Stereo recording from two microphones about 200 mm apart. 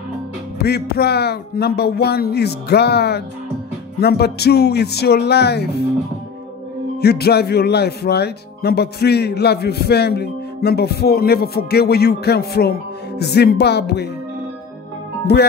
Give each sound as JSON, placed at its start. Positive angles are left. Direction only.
{"t": 0.6, "sound": "speech", "side_deg": 55}
{"t": 7.0, "sound": "speech", "side_deg": 55}
{"t": 15.3, "sound": "speech", "side_deg": 55}